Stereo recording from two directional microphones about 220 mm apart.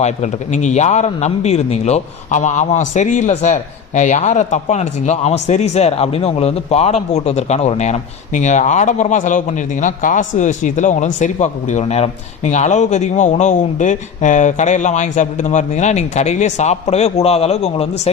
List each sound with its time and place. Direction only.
0.0 s a man's voice: 30° left (ahead or behind)